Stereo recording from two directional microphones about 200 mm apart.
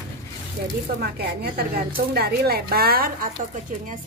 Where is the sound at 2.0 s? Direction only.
50° right (ahead or behind).